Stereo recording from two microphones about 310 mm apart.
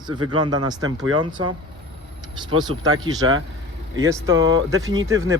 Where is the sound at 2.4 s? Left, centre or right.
Centre.